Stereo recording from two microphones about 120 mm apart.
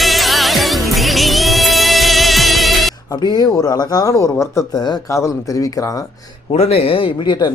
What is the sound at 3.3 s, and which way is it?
Speech, 35° left (ahead or behind).